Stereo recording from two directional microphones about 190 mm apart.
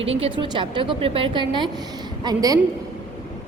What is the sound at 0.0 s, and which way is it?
A woman's voice, 30° right (ahead or behind).